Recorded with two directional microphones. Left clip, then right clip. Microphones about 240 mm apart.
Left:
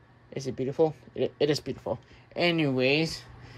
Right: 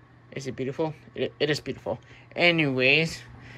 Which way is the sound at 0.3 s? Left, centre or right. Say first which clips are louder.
Even; centre.